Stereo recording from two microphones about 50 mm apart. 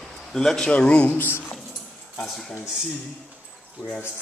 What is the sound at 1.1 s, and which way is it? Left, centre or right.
Speech, left.